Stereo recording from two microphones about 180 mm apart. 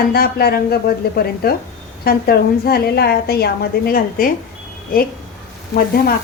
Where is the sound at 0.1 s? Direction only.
60° left (ahead or behind).